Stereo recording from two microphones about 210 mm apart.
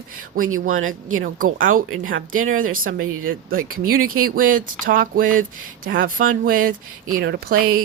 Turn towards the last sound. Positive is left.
turn(degrees=-45)  # may be behind; listen again after turning